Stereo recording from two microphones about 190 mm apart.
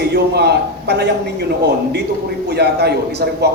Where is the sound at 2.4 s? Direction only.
60° right (ahead or behind).